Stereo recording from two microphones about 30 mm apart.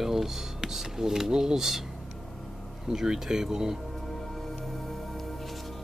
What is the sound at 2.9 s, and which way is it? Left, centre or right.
Speech, centre.